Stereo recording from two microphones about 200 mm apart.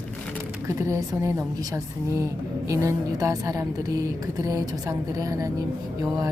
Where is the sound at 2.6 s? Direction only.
15° right (ahead or behind).